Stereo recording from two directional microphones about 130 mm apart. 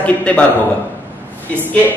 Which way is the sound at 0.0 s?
10° left (ahead or behind).